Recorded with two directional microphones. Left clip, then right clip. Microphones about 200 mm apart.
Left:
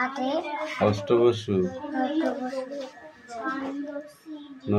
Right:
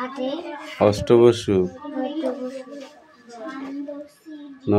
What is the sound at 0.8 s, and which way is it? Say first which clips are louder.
Speech: right 7 dB; 40° right (ahead or behind).